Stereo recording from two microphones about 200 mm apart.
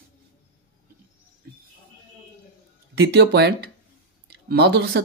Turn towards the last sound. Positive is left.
turn(degrees=-55)  # may be behind; listen again after turning